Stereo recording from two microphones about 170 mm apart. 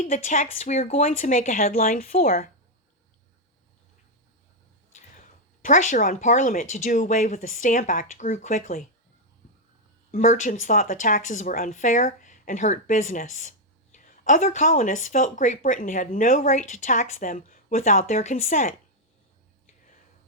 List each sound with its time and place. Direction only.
0.0 s speech: 45° left (ahead or behind)
1.7 s speech: 60° left (ahead or behind)
5.6 s speech: 50° left (ahead or behind)
10.1 s speech: 45° left (ahead or behind)